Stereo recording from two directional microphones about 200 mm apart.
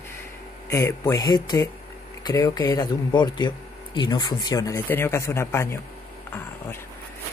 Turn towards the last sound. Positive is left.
turn(degrees=10)  # may be behind; listen again after turning